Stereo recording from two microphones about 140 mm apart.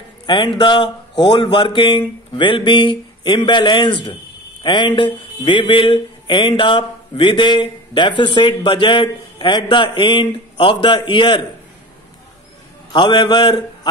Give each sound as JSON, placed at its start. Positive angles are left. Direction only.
{"t": 0.3, "sound": "speech", "side_deg": 35}
{"t": 12.9, "sound": "speech", "side_deg": 35}